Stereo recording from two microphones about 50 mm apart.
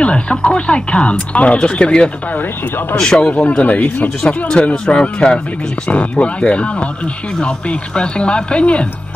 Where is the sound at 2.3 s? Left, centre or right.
Left.